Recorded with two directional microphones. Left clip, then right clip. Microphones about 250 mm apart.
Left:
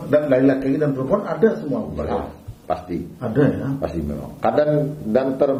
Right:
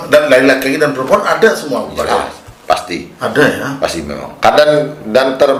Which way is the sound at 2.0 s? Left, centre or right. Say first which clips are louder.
Right 11 dB; centre.